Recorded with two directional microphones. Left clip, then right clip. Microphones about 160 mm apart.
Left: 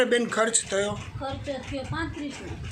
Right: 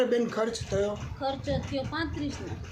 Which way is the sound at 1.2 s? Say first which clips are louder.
Right 3 dB; 30° right (ahead or behind).